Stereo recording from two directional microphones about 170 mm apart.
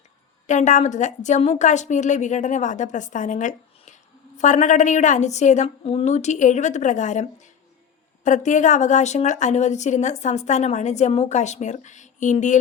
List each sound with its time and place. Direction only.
0.4 s a woman's voice: 45° left (ahead or behind)